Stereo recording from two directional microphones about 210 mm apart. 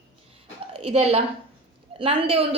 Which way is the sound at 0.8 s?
30° right (ahead or behind).